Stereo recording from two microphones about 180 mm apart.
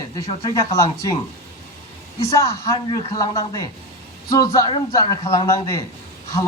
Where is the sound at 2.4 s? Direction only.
15° left (ahead or behind).